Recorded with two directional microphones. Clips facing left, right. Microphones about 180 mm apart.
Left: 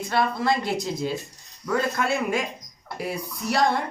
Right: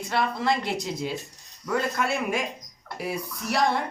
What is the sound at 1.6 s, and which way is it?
Speech, centre (ahead or behind).